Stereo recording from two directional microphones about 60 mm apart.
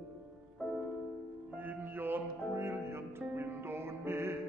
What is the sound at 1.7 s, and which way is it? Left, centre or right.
Music, right.